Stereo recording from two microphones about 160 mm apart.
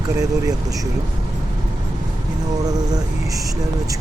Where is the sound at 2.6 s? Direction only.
25° right (ahead or behind).